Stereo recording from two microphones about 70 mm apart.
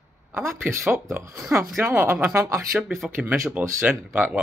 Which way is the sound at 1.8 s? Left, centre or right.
Right.